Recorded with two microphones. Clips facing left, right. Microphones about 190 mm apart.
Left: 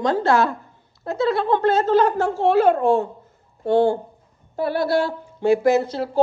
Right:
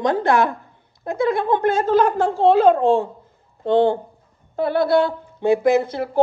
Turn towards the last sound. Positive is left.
turn(degrees=-15)  # may be behind; listen again after turning